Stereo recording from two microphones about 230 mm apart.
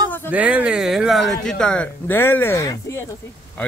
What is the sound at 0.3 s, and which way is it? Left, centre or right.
A man's voice, centre.